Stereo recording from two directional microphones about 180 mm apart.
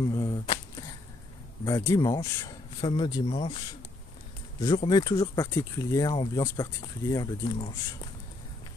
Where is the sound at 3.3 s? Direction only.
40° left (ahead or behind).